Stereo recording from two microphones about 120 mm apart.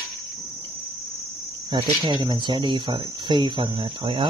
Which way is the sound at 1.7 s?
40° right (ahead or behind).